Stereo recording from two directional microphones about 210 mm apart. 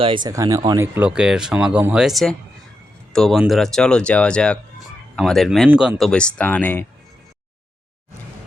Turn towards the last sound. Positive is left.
turn(degrees=10)  # may be behind; listen again after turning